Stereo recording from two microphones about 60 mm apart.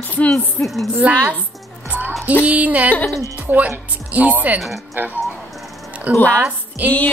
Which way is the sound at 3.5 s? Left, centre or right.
Right.